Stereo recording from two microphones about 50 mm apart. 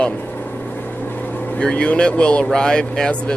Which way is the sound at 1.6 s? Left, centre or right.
Centre.